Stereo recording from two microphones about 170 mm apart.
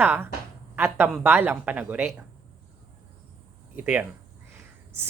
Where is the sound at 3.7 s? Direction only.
10° right (ahead or behind).